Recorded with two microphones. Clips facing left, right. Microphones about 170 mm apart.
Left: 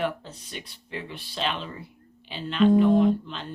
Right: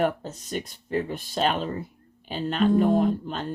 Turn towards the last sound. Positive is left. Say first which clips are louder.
# left 2 dB
turn(degrees=-45)  # may be behind; listen again after turning